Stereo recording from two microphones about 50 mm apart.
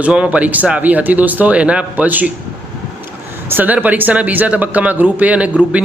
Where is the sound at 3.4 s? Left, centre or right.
Right.